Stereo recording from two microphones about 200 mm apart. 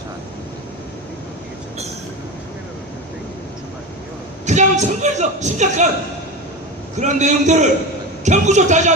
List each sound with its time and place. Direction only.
4.4 s speech: 35° right (ahead or behind)
6.9 s speech: 35° right (ahead or behind)